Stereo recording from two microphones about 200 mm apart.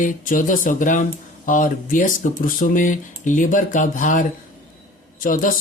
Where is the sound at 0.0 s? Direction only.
40° left (ahead or behind).